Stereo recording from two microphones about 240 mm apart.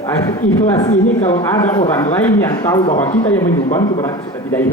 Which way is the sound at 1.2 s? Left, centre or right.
Left.